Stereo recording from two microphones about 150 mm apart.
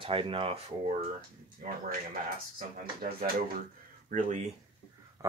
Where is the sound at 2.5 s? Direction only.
65° right (ahead or behind).